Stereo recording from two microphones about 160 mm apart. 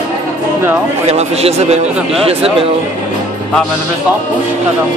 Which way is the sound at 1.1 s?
40° right (ahead or behind).